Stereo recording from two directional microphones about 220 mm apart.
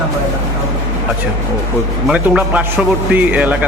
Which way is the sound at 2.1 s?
5° right (ahead or behind).